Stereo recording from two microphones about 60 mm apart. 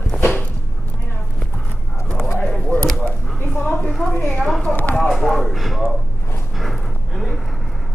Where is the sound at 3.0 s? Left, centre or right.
Left.